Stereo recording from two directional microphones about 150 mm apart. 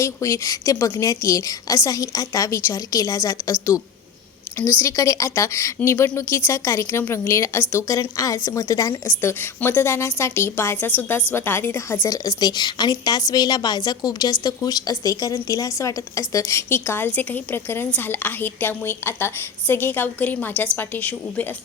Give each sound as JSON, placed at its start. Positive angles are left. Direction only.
{"t": 0.0, "sound": "a woman's voice", "side_deg": 20}
{"t": 4.8, "sound": "a woman's voice", "side_deg": 20}